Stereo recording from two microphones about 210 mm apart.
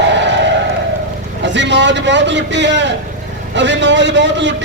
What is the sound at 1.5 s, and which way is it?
A man's voice, 60° right (ahead or behind).